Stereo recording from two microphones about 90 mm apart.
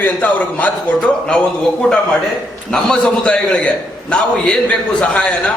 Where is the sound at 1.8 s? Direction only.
Centre (ahead or behind).